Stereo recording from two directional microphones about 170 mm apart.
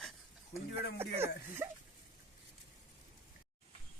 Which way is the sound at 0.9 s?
15° right (ahead or behind).